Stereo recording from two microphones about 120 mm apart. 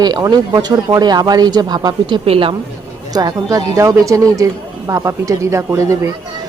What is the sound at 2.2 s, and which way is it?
Speech, 50° right (ahead or behind).